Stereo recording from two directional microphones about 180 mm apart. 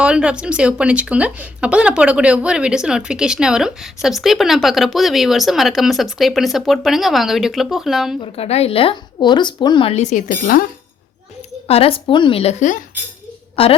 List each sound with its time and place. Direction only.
0.0 s speech: 5° right (ahead or behind)
8.2 s a woman's voice: 35° left (ahead or behind); by 10.7 s 50° left (ahead or behind)
11.7 s a woman's voice: 30° left (ahead or behind)
13.6 s a woman's voice: 30° left (ahead or behind)